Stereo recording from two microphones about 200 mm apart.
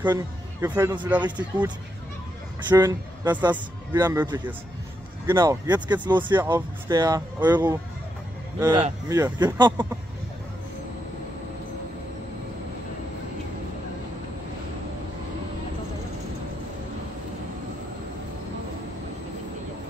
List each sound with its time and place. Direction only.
0.0 s speech: 10° right (ahead or behind)
2.7 s speech: 20° right (ahead or behind)